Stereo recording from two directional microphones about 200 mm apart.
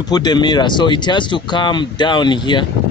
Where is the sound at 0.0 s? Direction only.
20° left (ahead or behind).